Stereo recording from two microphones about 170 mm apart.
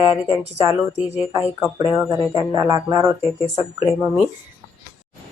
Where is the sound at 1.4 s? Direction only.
15° right (ahead or behind).